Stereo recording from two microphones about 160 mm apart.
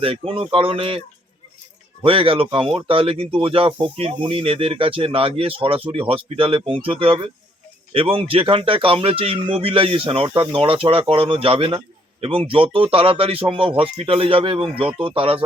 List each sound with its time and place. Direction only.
0.0 s speech: 35° right (ahead or behind)
2.0 s speech: 35° right (ahead or behind)